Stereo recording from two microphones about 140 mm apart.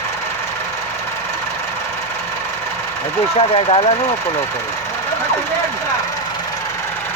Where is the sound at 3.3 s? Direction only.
45° left (ahead or behind).